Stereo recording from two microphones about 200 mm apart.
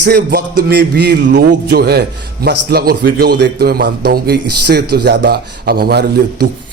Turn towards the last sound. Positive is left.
turn(degrees=-50)  # may be behind; listen again after turning